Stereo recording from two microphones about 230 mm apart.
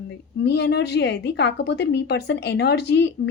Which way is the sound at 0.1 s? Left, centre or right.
Left.